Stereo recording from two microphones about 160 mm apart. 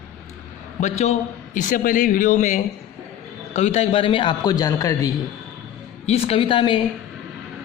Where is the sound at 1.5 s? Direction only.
55° left (ahead or behind); by 5.1 s 20° left (ahead or behind).